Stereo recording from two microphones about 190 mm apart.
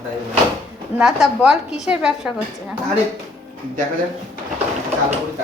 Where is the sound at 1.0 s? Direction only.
Centre (ahead or behind).